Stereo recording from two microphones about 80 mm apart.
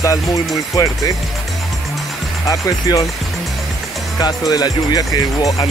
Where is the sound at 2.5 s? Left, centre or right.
Left.